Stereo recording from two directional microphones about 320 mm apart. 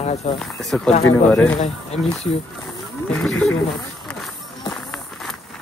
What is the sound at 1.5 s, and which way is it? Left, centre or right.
Speech, centre.